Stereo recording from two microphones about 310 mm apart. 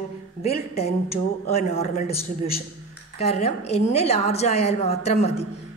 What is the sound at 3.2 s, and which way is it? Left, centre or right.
A woman's voice, centre.